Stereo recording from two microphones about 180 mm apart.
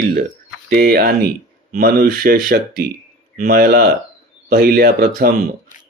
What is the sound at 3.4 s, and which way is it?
Speech, 55° right (ahead or behind).